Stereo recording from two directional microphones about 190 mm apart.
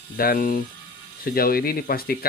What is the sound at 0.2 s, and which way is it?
Speech, 50° left (ahead or behind).